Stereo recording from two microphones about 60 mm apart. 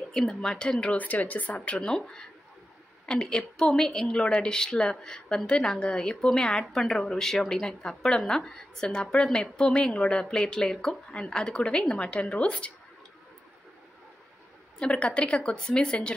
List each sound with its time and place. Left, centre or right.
0.1 s speech: centre; by 1.6 s left
1.6 s a woman's voice: centre
14.8 s a woman's voice: centre